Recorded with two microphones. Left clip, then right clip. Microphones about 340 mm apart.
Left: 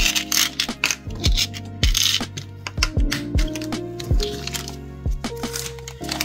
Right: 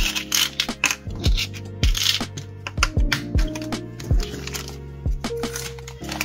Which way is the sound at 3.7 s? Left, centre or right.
Centre.